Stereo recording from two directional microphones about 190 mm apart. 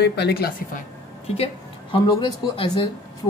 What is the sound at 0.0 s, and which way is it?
Speech, 60° left (ahead or behind).